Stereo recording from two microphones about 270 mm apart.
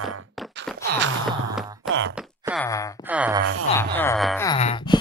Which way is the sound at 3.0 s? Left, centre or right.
Centre.